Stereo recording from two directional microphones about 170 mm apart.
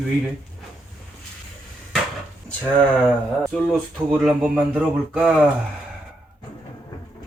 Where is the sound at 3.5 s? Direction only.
5° left (ahead or behind).